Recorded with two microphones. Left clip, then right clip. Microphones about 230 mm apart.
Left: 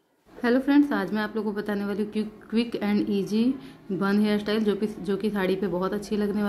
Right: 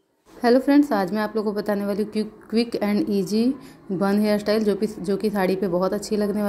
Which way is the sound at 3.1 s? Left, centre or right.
Centre.